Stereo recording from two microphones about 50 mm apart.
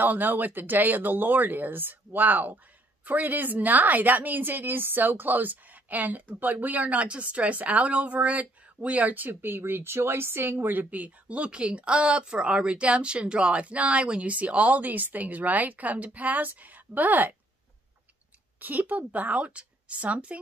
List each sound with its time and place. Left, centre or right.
0.0 s a woman's voice: right
18.6 s a woman's voice: right